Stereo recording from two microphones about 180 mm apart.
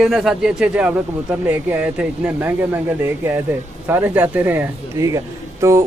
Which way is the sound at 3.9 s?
10° right (ahead or behind).